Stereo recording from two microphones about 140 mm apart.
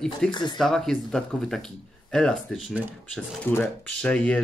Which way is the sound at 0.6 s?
5° left (ahead or behind).